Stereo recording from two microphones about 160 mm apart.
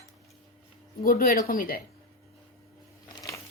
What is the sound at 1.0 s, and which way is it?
Speech, 65° left (ahead or behind).